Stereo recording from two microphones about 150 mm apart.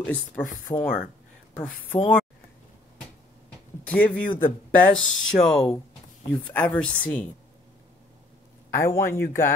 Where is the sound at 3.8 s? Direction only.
10° left (ahead or behind).